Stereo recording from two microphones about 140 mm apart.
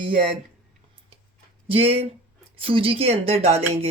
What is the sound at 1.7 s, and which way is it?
Speech, 45° right (ahead or behind).